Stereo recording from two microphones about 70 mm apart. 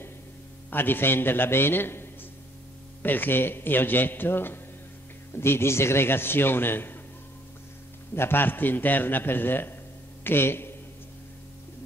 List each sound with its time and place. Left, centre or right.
0.7 s a man's voice: left
8.1 s a man's voice: left